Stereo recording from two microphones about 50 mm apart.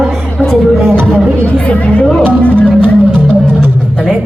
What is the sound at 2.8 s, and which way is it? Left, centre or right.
Music, right.